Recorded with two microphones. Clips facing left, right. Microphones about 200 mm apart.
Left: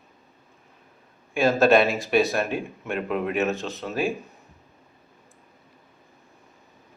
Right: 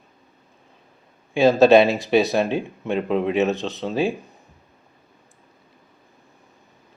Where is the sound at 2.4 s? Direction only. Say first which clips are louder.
Right 5 dB; 25° right (ahead or behind).